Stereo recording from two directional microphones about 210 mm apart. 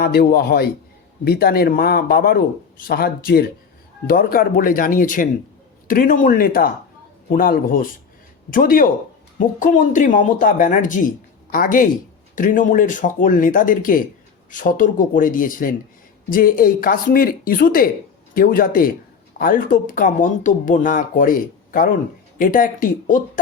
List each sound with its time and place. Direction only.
0.0 s speech: 45° left (ahead or behind)